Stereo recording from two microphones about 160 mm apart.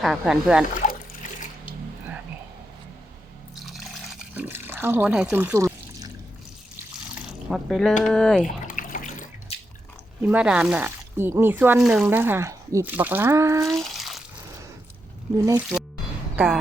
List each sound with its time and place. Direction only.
0.0 s speech: centre (ahead or behind)
3.6 s water: centre (ahead or behind)
4.4 s speech: 15° right (ahead or behind)
7.5 s speech: centre (ahead or behind)
8.6 s water: 55° left (ahead or behind)
9.5 s drip: 40° left (ahead or behind)
10.2 s speech: 5° right (ahead or behind)
13.7 s water: centre (ahead or behind)
15.4 s speech: 10° right (ahead or behind)